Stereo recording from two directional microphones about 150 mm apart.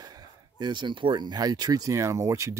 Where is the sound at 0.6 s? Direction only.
30° right (ahead or behind).